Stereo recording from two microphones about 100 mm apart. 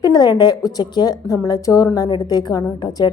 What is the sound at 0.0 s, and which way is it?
A woman's voice, 40° left (ahead or behind).